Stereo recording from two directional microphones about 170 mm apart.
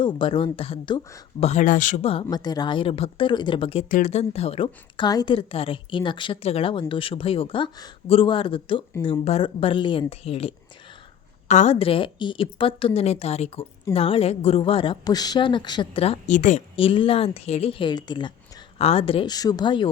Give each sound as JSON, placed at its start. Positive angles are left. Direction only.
{"t": 0.0, "sound": "speech", "side_deg": 30}
{"t": 1.4, "sound": "speech", "side_deg": 45}
{"t": 2.0, "sound": "a woman's voice", "side_deg": 35}
{"t": 3.8, "sound": "a woman's voice", "side_deg": 45}
{"t": 16.7, "sound": "a woman's voice", "side_deg": 30}